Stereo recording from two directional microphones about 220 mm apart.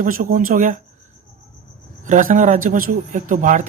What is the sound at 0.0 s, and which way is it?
Speech, 40° right (ahead or behind).